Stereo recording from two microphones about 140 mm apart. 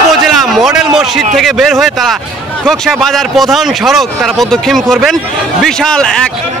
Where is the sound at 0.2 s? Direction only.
Centre (ahead or behind).